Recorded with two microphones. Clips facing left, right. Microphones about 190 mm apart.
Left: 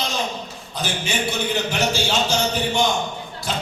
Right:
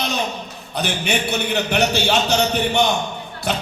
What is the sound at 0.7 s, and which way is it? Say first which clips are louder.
A man's voice: right 4 dB; 65° right (ahead or behind).